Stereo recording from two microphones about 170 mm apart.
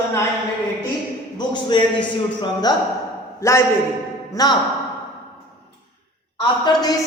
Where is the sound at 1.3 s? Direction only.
25° left (ahead or behind).